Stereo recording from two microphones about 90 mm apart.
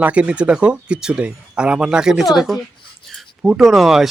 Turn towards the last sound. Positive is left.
turn(degrees=0)  # may be behind; listen again after turning